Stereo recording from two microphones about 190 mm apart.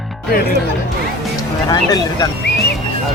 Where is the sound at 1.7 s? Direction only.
20° left (ahead or behind).